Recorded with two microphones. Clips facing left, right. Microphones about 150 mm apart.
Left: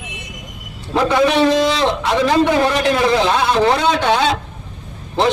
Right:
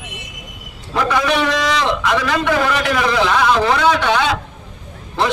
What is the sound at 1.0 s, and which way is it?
A man's voice, 25° left (ahead or behind).